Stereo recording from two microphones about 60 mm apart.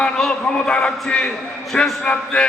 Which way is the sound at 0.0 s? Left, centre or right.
Centre.